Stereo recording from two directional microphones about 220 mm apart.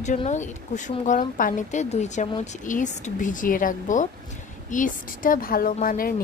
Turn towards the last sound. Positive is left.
turn(degrees=40)  # may be behind; listen again after turning